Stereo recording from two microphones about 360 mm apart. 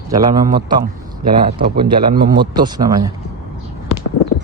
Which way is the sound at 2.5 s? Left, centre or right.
Centre.